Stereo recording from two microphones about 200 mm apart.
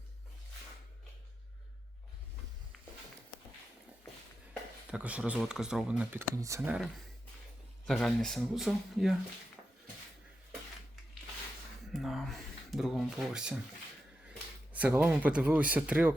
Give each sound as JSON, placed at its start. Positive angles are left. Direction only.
{"t": 4.9, "sound": "speech", "side_deg": -5}
{"t": 11.9, "sound": "speech", "side_deg": 0}
{"t": 14.7, "sound": "speech", "side_deg": -5}